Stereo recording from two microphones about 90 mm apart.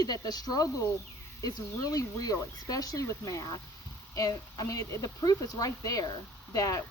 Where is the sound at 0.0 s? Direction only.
45° left (ahead or behind).